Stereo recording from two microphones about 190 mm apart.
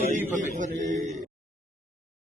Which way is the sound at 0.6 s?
40° right (ahead or behind).